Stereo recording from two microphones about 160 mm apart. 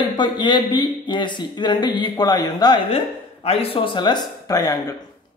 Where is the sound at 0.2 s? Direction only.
30° left (ahead or behind).